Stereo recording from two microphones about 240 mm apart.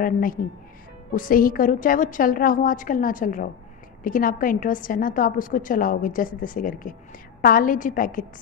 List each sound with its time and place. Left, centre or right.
0.0 s a woman's voice: left